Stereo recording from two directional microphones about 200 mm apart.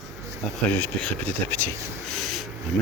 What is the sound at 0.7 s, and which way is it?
Speech, 10° left (ahead or behind).